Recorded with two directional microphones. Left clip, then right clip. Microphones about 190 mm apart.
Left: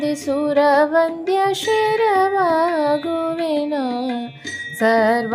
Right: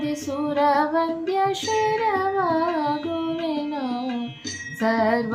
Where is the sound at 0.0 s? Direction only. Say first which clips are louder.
Left 6 dB; 50° left (ahead or behind).